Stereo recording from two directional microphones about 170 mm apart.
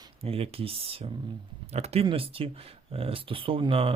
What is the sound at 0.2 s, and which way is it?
Speech, 35° right (ahead or behind).